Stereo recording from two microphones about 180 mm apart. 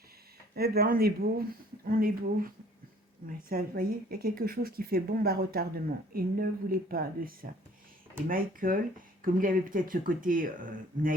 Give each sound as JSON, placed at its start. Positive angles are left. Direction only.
{"t": 0.5, "sound": "speech", "side_deg": -60}